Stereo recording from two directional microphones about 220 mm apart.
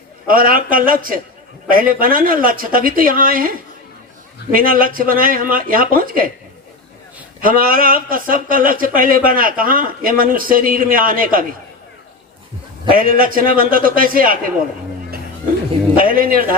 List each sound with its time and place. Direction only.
0.3 s speech: 40° right (ahead or behind)
4.5 s speech: 40° right (ahead or behind)
7.4 s speech: 40° right (ahead or behind)
12.9 s speech: 40° right (ahead or behind)
16.0 s speech: 40° right (ahead or behind)